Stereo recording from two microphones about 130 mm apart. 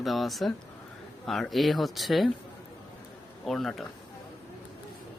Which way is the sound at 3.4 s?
Centre (ahead or behind).